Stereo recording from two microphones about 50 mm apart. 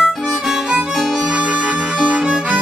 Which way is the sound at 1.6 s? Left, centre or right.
Centre.